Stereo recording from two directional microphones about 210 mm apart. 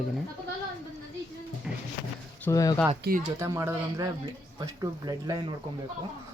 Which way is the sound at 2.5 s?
15° left (ahead or behind).